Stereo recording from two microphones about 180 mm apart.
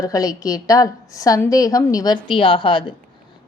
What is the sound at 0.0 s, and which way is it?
A woman's voice, 20° left (ahead or behind).